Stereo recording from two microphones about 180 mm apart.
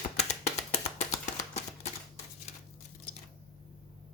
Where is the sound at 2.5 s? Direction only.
40° left (ahead or behind).